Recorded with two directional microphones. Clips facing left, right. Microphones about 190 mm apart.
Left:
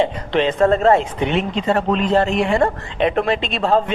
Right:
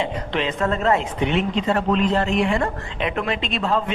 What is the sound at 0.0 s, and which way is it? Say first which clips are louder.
Speech: left 6 dB; 35° left (ahead or behind).